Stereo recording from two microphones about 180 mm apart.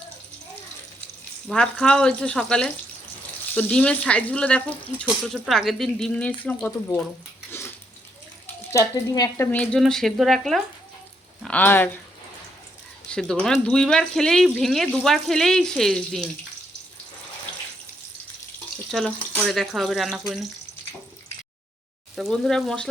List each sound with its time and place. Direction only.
1.5 s speech: 5° left (ahead or behind)
8.7 s speech: 20° left (ahead or behind)
9.5 s speech: 5° left (ahead or behind)
13.1 s speech: 5° left (ahead or behind)
18.9 s speech: centre (ahead or behind)
22.1 s speech: centre (ahead or behind)